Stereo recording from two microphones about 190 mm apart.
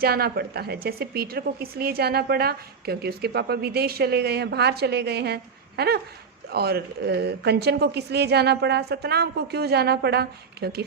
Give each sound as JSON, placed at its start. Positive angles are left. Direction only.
{"t": 0.0, "sound": "speech", "side_deg": -55}